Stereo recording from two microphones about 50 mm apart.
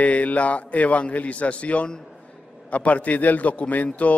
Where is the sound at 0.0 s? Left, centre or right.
Left.